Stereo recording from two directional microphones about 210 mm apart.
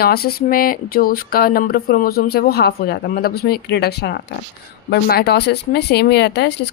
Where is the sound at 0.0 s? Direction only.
45° left (ahead or behind).